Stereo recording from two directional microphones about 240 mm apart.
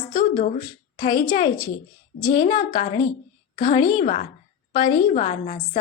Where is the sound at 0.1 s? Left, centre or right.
Left.